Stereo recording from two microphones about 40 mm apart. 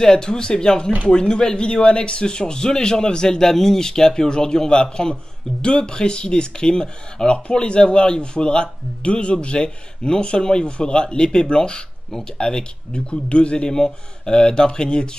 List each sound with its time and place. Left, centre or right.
0.0 s speech: centre